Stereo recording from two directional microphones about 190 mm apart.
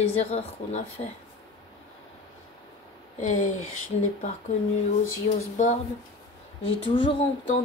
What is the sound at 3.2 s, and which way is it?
Speech, 40° left (ahead or behind).